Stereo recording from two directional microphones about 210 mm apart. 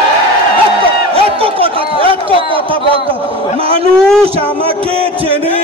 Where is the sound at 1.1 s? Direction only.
25° right (ahead or behind).